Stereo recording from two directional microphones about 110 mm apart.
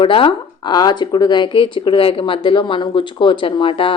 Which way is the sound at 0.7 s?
40° left (ahead or behind).